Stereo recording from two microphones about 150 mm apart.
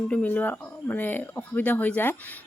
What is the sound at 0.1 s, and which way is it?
Speech, 10° left (ahead or behind).